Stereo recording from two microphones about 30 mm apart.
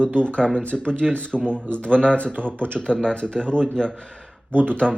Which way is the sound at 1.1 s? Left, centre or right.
Left.